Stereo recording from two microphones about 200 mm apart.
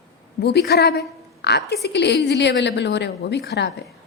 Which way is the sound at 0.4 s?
55° left (ahead or behind).